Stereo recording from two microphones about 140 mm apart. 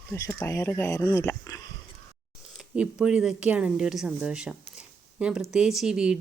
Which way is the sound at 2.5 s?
5° right (ahead or behind).